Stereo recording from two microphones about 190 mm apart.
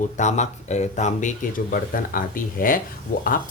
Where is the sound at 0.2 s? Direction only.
40° left (ahead or behind).